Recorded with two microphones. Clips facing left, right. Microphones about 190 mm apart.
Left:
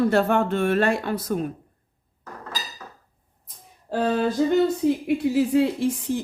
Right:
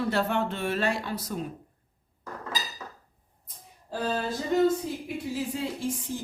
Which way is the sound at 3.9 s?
70° left (ahead or behind).